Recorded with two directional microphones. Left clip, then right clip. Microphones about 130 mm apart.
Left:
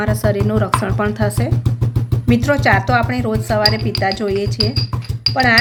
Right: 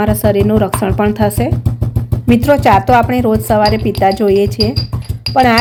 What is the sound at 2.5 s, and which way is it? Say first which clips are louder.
A woman's voice: right 6 dB; 40° right (ahead or behind).